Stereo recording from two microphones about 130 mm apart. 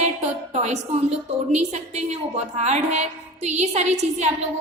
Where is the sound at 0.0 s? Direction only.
60° right (ahead or behind).